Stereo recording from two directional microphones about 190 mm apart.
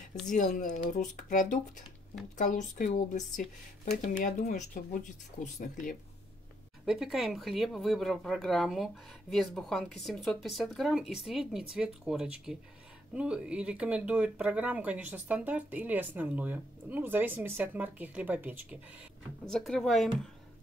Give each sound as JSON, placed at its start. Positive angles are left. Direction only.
{"t": 0.5, "sound": "speech", "side_deg": 45}
{"t": 6.9, "sound": "speech", "side_deg": 0}
{"t": 19.4, "sound": "speech", "side_deg": 0}